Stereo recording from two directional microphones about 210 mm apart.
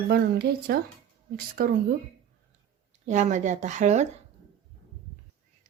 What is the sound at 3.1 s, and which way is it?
Speech, 35° right (ahead or behind).